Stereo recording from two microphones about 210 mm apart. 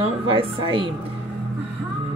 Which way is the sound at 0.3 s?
25° right (ahead or behind).